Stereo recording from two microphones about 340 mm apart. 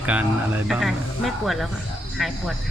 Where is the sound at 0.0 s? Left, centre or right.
Centre.